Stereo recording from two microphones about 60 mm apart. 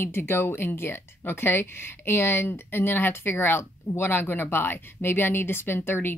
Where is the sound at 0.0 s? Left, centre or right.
Left.